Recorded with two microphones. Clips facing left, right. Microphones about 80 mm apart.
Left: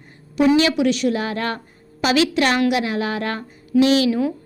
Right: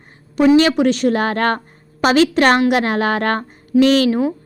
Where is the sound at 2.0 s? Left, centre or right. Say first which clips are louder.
Right 5 dB; right.